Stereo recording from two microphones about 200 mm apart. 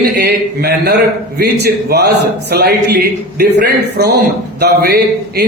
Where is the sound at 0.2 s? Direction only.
55° right (ahead or behind).